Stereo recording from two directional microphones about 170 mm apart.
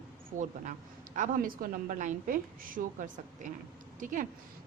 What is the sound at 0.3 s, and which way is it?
A woman's voice, 45° right (ahead or behind).